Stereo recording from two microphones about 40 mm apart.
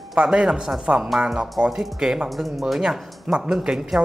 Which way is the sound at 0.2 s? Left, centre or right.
Right.